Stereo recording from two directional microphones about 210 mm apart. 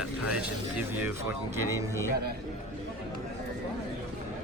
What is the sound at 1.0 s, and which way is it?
Speech, 10° right (ahead or behind).